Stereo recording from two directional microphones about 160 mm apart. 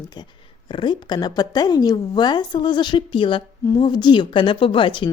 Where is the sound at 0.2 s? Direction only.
25° left (ahead or behind).